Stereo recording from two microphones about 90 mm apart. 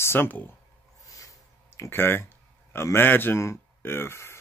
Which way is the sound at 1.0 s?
40° left (ahead or behind).